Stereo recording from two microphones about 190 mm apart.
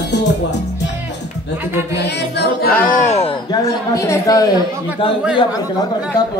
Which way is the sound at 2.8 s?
40° left (ahead or behind).